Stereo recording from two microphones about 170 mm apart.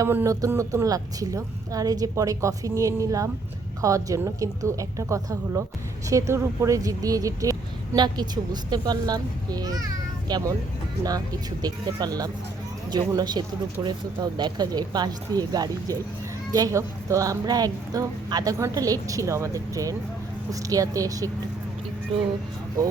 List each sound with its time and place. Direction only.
0.0 s speech: 15° right (ahead or behind)
11.6 s speech: 25° right (ahead or behind)